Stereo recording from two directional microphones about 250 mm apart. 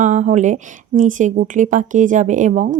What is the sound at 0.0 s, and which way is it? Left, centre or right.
Speech, right.